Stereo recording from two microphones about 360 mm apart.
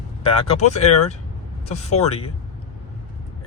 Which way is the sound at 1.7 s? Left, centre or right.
Centre.